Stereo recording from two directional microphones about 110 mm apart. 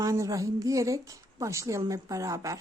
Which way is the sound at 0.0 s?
30° right (ahead or behind).